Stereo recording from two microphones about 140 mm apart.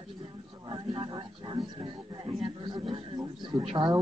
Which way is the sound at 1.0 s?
35° right (ahead or behind).